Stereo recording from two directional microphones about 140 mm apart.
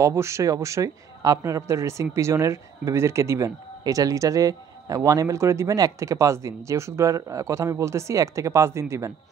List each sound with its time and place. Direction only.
0.0 s speech: 20° right (ahead or behind)